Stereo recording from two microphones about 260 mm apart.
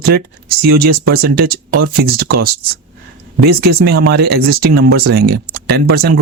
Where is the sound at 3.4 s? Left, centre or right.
Right.